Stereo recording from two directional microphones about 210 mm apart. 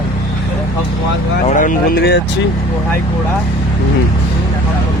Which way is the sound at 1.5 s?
40° left (ahead or behind).